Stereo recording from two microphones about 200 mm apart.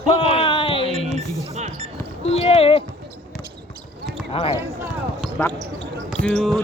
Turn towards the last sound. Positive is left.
turn(degrees=5)  # may be behind; listen again after turning